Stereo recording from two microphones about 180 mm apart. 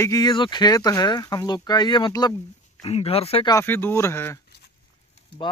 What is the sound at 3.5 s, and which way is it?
Speech, 15° left (ahead or behind).